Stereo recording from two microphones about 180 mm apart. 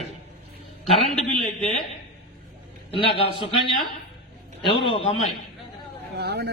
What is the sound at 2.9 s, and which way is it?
Speech, 30° left (ahead or behind).